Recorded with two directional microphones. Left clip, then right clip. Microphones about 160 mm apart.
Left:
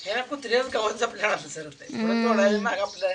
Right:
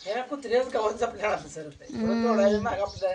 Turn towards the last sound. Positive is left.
turn(degrees=-5)  # may be behind; listen again after turning